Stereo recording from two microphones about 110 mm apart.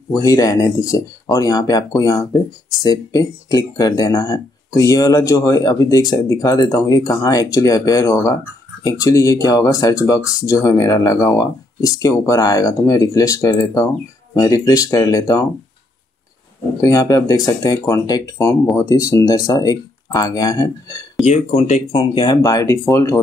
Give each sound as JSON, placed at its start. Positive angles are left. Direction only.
{"t": 0.2, "sound": "speech", "side_deg": 35}
{"t": 16.8, "sound": "speech", "side_deg": 35}
{"t": 18.4, "sound": "speech", "side_deg": 25}
{"t": 21.3, "sound": "speech", "side_deg": 85}
{"t": 21.9, "sound": "speech", "side_deg": 45}
{"t": 22.4, "sound": "speech", "side_deg": 30}